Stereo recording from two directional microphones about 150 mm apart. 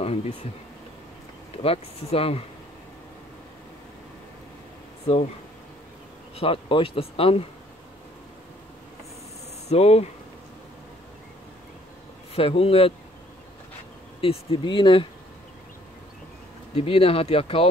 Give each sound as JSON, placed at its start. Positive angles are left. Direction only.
{"t": 0.0, "sound": "a sound", "side_deg": 40}
{"t": 1.6, "sound": "speech", "side_deg": 40}
{"t": 6.3, "sound": "speech", "side_deg": 40}
{"t": 9.7, "sound": "speech", "side_deg": 45}
{"t": 12.4, "sound": "speech", "side_deg": 40}
{"t": 14.2, "sound": "speech", "side_deg": 40}
{"t": 16.7, "sound": "speech", "side_deg": 40}